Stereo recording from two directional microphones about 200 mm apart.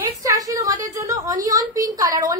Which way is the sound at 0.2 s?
15° right (ahead or behind).